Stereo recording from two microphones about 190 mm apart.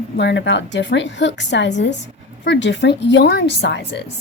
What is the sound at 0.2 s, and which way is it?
Speech, 65° left (ahead or behind).